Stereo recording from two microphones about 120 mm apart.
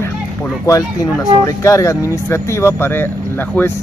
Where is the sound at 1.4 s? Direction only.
25° left (ahead or behind).